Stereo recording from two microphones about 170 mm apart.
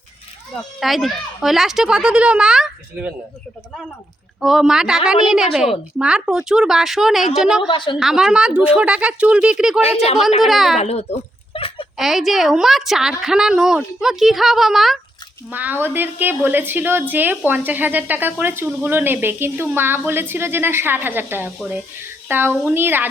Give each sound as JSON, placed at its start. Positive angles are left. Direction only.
{"t": 0.8, "sound": "a woman's voice", "side_deg": 0}
{"t": 4.4, "sound": "a woman's voice", "side_deg": 0}
{"t": 7.7, "sound": "a woman's voice", "side_deg": 30}
{"t": 7.9, "sound": "a woman's voice", "side_deg": 0}
{"t": 10.8, "sound": "a sound", "side_deg": 40}
{"t": 11.9, "sound": "a woman's voice", "side_deg": 0}